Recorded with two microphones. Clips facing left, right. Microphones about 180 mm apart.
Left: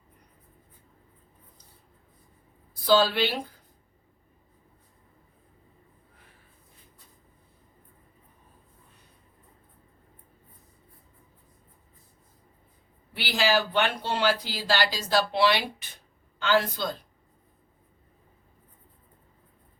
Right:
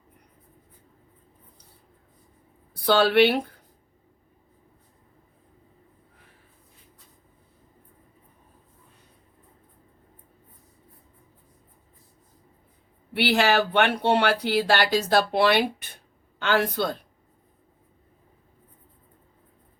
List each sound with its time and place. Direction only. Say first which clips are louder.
2.8 s speech: right 4 dB; 65° right (ahead or behind)
13.1 s speech: right 4 dB; 65° right (ahead or behind)